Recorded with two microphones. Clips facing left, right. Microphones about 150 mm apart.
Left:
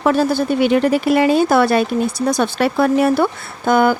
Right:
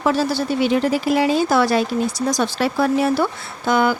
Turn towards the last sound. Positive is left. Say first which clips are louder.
# left 4 dB
turn(degrees=50)  # may be behind; listen again after turning